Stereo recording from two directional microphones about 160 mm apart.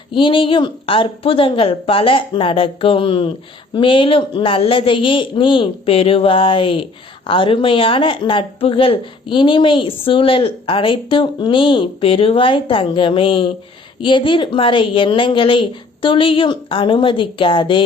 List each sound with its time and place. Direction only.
0.1 s a woman's voice: 30° left (ahead or behind)